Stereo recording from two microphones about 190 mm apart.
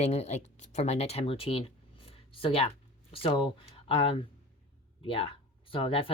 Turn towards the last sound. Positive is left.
turn(degrees=30)  # may be behind; listen again after turning